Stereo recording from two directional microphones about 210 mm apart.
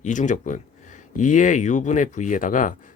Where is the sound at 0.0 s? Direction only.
35° left (ahead or behind).